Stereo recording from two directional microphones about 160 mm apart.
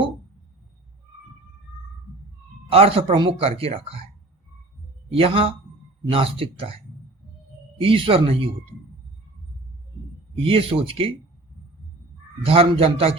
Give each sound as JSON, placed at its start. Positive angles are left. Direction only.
{"t": 2.6, "sound": "speech", "side_deg": -35}
{"t": 5.1, "sound": "speech", "side_deg": -35}
{"t": 7.8, "sound": "speech", "side_deg": -35}
{"t": 10.3, "sound": "speech", "side_deg": -35}
{"t": 12.5, "sound": "speech", "side_deg": -35}